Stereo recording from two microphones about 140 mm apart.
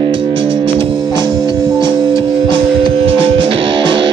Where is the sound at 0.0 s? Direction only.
40° right (ahead or behind).